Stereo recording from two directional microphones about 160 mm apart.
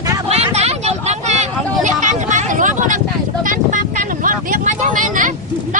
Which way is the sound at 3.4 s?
60° right (ahead or behind).